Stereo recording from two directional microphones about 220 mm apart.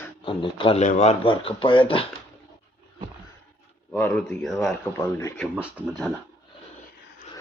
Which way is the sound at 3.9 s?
5° left (ahead or behind).